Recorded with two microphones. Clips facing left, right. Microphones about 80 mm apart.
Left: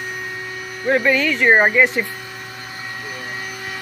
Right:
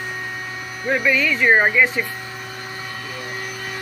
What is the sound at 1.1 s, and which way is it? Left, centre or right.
Speech, left.